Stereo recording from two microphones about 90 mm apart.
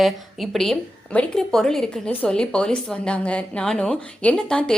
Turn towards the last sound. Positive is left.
turn(degrees=10)  # may be behind; listen again after turning